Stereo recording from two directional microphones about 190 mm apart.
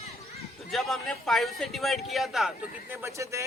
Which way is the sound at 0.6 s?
Centre (ahead or behind).